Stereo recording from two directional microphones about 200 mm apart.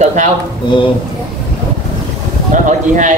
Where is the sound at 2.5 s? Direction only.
40° right (ahead or behind).